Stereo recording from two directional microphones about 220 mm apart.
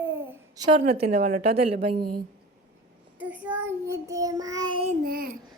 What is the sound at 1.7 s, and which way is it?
Speech, 25° right (ahead or behind).